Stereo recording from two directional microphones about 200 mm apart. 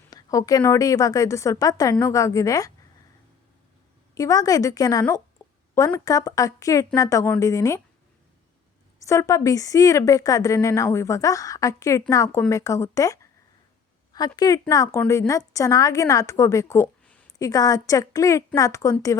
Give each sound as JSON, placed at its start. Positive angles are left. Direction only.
{"t": 0.1, "sound": "speech", "side_deg": 15}
{"t": 4.1, "sound": "speech", "side_deg": 15}
{"t": 9.0, "sound": "a woman's voice", "side_deg": 15}
{"t": 17.3, "sound": "speech", "side_deg": 15}